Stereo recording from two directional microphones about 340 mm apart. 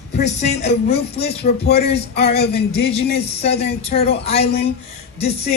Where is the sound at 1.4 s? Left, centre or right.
Left.